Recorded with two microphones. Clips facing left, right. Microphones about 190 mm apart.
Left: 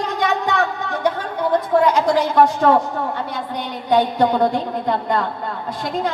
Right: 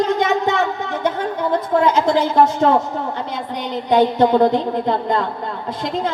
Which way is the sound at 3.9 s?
25° right (ahead or behind).